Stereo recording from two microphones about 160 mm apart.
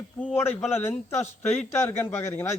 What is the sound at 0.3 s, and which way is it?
A man's voice, 15° left (ahead or behind).